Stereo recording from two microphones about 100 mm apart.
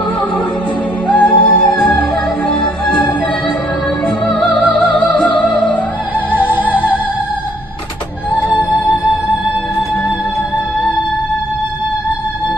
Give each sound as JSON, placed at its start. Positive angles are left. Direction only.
{"t": 1.0, "sound": "music", "side_deg": 15}
{"t": 4.3, "sound": "opera", "side_deg": 5}
{"t": 4.7, "sound": "music", "side_deg": 15}
{"t": 6.3, "sound": "music", "side_deg": -15}